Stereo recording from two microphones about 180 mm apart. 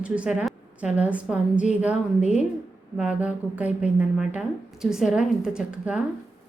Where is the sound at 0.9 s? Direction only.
5° right (ahead or behind).